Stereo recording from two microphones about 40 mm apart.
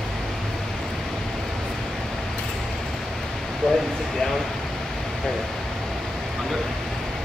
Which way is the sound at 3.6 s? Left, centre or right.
Centre.